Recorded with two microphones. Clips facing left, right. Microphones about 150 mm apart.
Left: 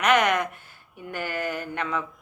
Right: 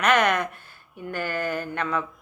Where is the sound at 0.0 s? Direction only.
15° left (ahead or behind).